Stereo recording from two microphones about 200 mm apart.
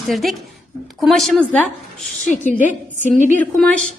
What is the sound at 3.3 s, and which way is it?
Speech, 5° left (ahead or behind).